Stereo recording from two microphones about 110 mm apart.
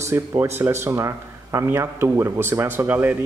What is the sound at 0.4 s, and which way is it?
Speech, 25° right (ahead or behind).